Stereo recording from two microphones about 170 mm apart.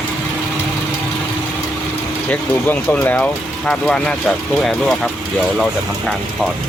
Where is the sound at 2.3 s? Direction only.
10° left (ahead or behind).